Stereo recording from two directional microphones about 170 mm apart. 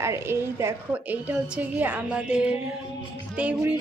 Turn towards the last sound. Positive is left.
turn(degrees=-5)  # may be behind; listen again after turning